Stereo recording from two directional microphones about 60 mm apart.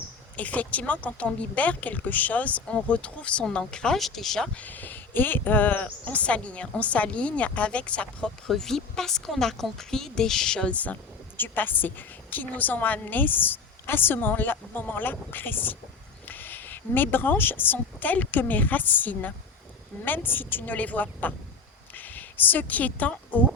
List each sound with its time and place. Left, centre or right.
0.3 s speech: left; by 4.4 s centre
4.5 s speech: left
8.4 s speech: centre
11.3 s a woman's voice: left